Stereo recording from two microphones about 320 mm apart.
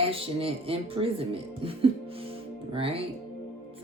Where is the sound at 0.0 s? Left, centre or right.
Centre.